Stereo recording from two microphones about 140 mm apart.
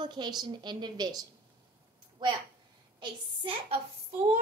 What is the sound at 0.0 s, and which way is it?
A child's voice, 30° right (ahead or behind).